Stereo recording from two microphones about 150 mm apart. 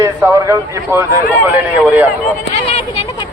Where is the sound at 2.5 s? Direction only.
45° left (ahead or behind).